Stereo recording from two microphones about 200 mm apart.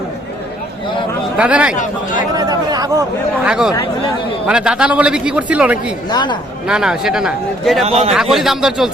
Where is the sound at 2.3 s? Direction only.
20° right (ahead or behind).